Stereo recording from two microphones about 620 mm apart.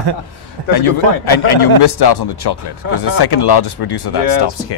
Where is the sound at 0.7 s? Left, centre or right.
Left.